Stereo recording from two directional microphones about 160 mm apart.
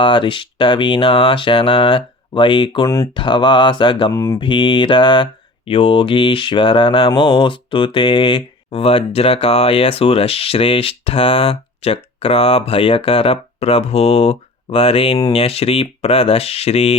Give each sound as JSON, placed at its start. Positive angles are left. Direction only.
{"t": 0.0, "sound": "speech", "side_deg": 30}
{"t": 3.2, "sound": "mantra", "side_deg": 30}
{"t": 4.1, "sound": "mantra", "side_deg": 20}
{"t": 4.4, "sound": "speech", "side_deg": 30}